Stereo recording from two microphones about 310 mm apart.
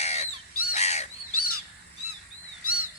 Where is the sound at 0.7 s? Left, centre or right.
Left.